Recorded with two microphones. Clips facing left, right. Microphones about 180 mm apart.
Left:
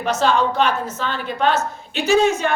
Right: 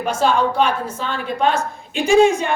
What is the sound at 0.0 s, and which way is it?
A woman's voice, 10° right (ahead or behind).